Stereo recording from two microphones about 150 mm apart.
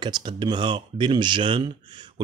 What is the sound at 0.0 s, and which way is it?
Speech, 30° right (ahead or behind).